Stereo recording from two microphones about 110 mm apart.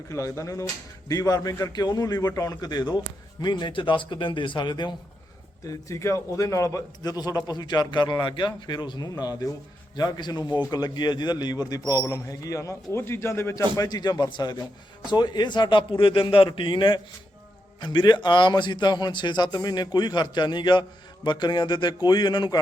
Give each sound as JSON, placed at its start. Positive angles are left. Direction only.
{"t": 0.1, "sound": "a man's voice", "side_deg": 30}
{"t": 5.6, "sound": "a man's voice", "side_deg": 25}
{"t": 13.7, "sound": "a man's voice", "side_deg": 35}